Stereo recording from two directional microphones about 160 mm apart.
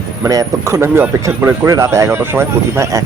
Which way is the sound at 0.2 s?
20° right (ahead or behind).